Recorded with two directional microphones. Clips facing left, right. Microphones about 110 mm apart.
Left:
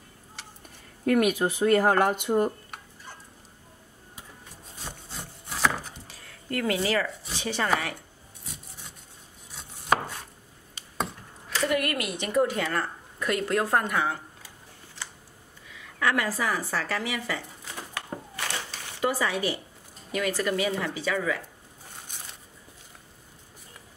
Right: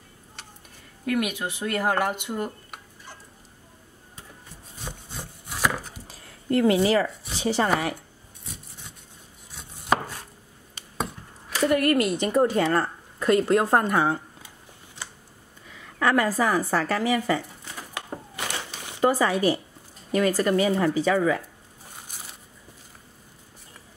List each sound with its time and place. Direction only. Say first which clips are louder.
1.0 s speech: left 4 dB; 40° left (ahead or behind)
5.5 s chopping: even; 5° right (ahead or behind)
6.0 s a sound: right 8 dB; 25° right (ahead or behind)
9.6 s chopping: right 1 dB; centre (ahead or behind)
11.7 s a woman's voice: right 9 dB; 35° right (ahead or behind)
15.0 s a sound: right 1 dB; 20° right (ahead or behind)
16.0 s a woman's voice: right 5 dB; 40° right (ahead or behind)
17.9 s a sound: right 2 dB; 20° right (ahead or behind)
18.9 s a woman's voice: right 5 dB; 45° right (ahead or behind)